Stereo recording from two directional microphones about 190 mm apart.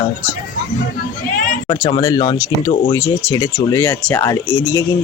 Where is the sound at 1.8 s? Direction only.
20° left (ahead or behind).